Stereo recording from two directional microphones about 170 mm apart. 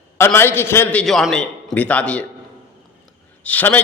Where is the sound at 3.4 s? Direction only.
10° left (ahead or behind).